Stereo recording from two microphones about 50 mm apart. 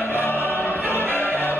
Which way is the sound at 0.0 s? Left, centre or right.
Left.